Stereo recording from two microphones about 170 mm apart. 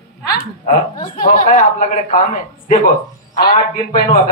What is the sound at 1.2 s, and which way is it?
Speech, 55° left (ahead or behind).